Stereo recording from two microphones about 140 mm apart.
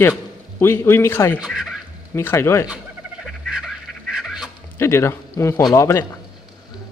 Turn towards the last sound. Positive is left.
turn(degrees=20)  # may be behind; listen again after turning